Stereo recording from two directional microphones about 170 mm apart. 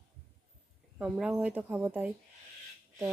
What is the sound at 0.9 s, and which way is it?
Speech, 5° right (ahead or behind).